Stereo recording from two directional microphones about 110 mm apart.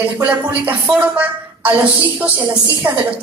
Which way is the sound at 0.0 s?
15° right (ahead or behind).